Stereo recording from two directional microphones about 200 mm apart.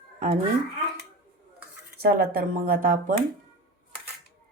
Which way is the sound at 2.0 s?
50° right (ahead or behind).